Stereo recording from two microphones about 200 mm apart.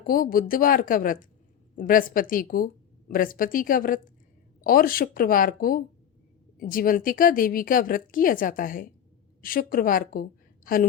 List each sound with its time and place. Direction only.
0.0 s a woman's voice: 45° left (ahead or behind)